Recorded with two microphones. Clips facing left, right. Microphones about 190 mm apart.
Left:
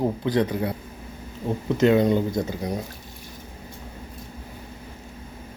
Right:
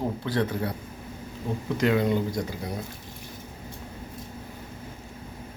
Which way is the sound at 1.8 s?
20° left (ahead or behind).